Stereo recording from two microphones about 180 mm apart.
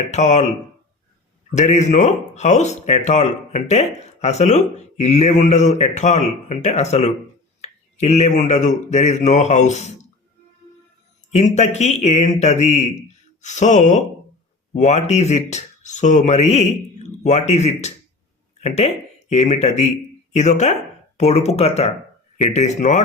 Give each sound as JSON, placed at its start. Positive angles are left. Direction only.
{"t": 0.1, "sound": "speech", "side_deg": 40}
{"t": 1.5, "sound": "speech", "side_deg": 40}
{"t": 11.3, "sound": "speech", "side_deg": 40}